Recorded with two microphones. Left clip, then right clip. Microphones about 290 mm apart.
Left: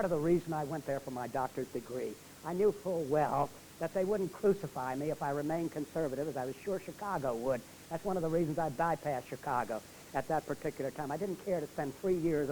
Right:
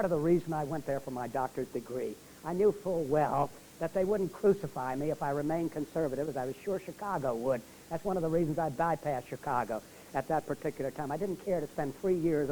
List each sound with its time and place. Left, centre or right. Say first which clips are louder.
0.0 s speech: right 2 dB; left